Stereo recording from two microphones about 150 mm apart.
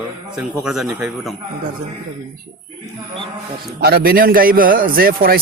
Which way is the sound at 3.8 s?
90° right.